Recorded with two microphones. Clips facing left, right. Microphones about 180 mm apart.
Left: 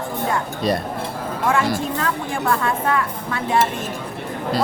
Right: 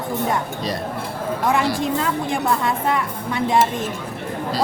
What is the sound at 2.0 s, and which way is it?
Speech, 20° right (ahead or behind).